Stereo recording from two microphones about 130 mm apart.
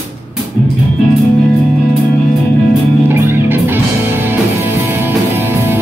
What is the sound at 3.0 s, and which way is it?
Music, 15° right (ahead or behind).